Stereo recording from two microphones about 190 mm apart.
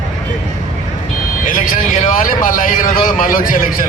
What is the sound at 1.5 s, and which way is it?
A man's voice, 45° left (ahead or behind).